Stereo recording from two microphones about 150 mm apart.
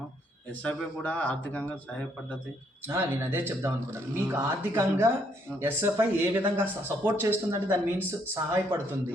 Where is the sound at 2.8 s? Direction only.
15° right (ahead or behind).